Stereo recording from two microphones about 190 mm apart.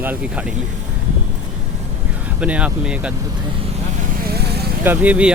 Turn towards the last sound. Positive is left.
turn(degrees=-5)  # may be behind; listen again after turning